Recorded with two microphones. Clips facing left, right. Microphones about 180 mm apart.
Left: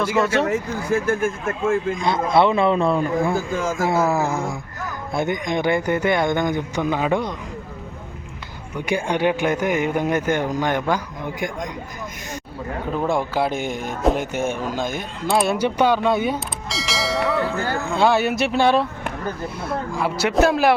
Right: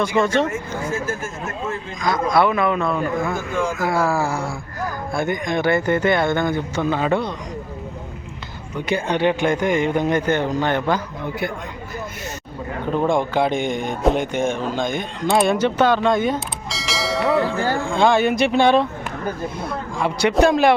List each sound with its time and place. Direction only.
0.0 s speech: 5° left (ahead or behind)
0.9 s speech: 60° left (ahead or behind)
2.0 s a man's voice: 25° left (ahead or behind); by 3.8 s 40° left (ahead or behind)
3.8 s speech: 20° left (ahead or behind)
8.9 s speech: 10° left (ahead or behind)
12.9 s speech: 5° left (ahead or behind)
20.0 s speech: 5° left (ahead or behind)